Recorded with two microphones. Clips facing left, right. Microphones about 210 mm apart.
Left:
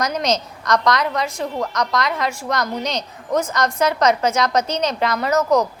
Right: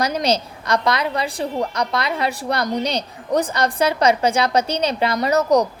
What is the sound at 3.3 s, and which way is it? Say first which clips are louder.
Speech: right 1 dB; 30° right (ahead or behind).